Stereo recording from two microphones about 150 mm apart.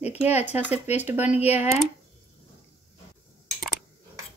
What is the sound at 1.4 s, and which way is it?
Speech, 45° left (ahead or behind).